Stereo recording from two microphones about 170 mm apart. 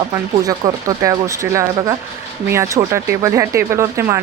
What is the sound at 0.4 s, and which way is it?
Speech, 20° right (ahead or behind).